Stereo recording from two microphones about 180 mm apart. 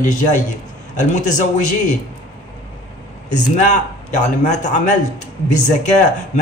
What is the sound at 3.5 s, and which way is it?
A man's voice, 40° left (ahead or behind).